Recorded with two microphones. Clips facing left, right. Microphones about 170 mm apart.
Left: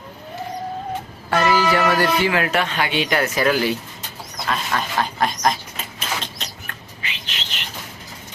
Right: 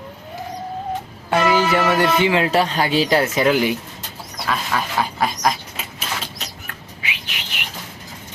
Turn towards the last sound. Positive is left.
turn(degrees=-15)  # may be behind; listen again after turning